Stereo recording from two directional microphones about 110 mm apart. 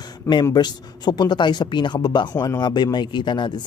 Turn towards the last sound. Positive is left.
turn(degrees=45)  # may be behind; listen again after turning